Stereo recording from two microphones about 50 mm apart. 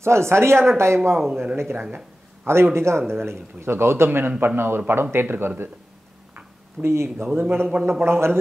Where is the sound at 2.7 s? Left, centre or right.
Right.